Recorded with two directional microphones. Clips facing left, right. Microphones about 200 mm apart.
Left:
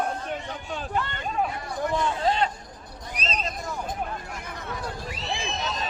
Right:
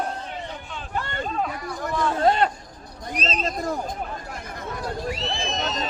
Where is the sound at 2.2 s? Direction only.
55° right (ahead or behind).